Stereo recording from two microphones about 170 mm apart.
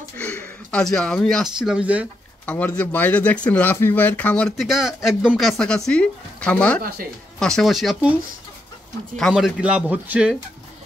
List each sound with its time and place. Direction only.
0.7 s speech: 5° left (ahead or behind)
2.4 s speech: 10° left (ahead or behind)
6.8 s a woman's voice: 60° right (ahead or behind)
7.3 s speech: 5° left (ahead or behind)